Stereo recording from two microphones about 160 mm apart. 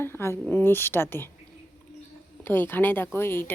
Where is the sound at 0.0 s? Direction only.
15° left (ahead or behind).